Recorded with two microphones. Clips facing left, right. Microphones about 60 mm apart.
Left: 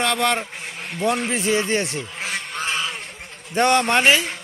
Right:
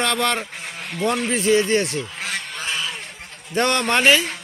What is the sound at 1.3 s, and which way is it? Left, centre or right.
Speech, centre.